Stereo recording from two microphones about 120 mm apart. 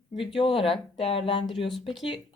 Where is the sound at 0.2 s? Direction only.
50° left (ahead or behind).